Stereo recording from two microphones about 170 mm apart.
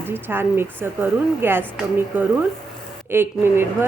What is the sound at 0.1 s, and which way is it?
A woman's voice, 15° right (ahead or behind).